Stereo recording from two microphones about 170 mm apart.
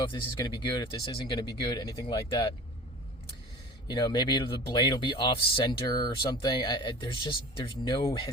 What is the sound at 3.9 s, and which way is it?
Speech, 25° left (ahead or behind).